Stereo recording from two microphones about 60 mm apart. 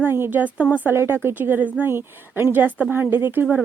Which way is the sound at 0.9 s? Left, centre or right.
Right.